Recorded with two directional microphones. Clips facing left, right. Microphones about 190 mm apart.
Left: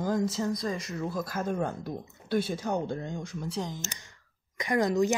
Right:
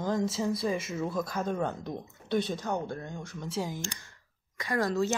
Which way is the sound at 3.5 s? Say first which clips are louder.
Right 2 dB; 5° right (ahead or behind).